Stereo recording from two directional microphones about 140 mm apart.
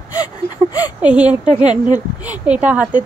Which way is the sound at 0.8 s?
10° right (ahead or behind).